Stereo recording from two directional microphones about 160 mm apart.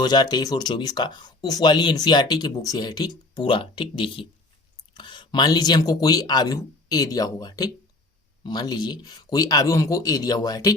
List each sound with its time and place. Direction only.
0.0 s speech: 25° left (ahead or behind)